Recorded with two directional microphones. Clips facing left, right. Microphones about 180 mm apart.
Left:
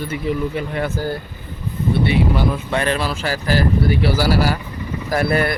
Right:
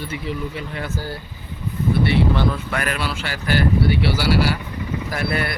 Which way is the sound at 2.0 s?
15° left (ahead or behind).